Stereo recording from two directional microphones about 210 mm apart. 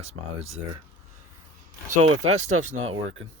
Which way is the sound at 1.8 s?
35° right (ahead or behind).